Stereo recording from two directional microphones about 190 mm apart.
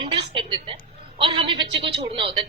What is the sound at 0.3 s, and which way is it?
Music, 25° right (ahead or behind).